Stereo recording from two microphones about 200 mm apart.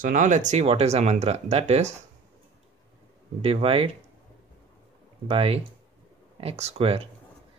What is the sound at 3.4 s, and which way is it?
Speech, 30° right (ahead or behind).